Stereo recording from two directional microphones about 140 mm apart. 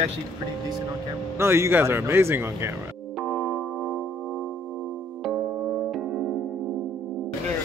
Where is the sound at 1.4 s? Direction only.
20° right (ahead or behind).